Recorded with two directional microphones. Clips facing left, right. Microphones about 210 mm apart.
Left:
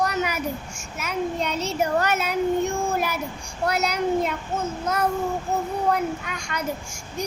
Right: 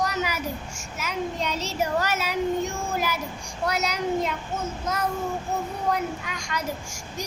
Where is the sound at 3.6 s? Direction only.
55° left (ahead or behind).